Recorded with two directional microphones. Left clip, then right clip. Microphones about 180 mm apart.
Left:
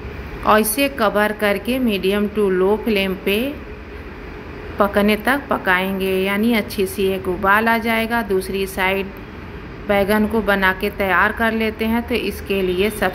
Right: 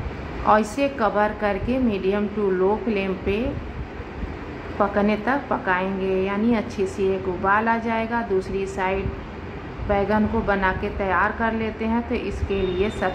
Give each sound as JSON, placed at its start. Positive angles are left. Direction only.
{"t": 0.5, "sound": "a woman's voice", "side_deg": 15}
{"t": 4.7, "sound": "a woman's voice", "side_deg": 15}